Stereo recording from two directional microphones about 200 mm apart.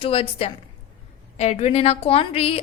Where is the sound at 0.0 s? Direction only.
30° left (ahead or behind).